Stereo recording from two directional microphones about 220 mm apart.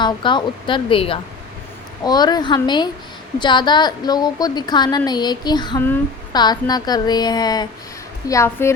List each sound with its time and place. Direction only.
0.0 s a woman's voice: 20° left (ahead or behind)